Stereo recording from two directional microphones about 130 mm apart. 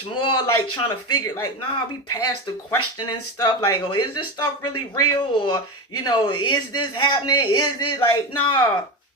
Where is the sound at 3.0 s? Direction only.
35° left (ahead or behind).